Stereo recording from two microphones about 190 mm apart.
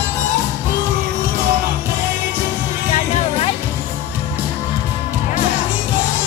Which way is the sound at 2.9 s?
30° left (ahead or behind).